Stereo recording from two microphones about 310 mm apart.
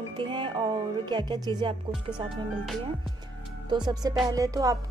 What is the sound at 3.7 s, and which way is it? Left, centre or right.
Speech, centre.